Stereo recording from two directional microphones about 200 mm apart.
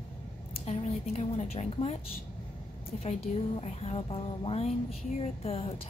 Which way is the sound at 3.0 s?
35° left (ahead or behind).